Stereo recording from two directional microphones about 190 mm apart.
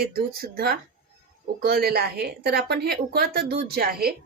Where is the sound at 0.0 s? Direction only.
55° right (ahead or behind).